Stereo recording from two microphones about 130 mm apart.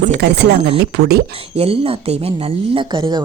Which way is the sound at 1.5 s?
45° right (ahead or behind).